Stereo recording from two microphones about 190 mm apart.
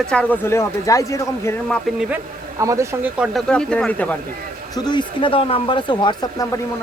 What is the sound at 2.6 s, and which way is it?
Speech, 15° right (ahead or behind).